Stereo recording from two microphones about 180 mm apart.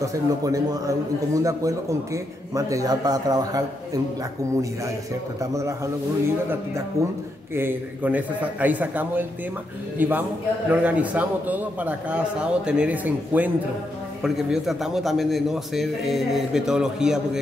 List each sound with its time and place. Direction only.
0.0 s a man's voice: 20° right (ahead or behind)
5.4 s a man's voice: 15° right (ahead or behind)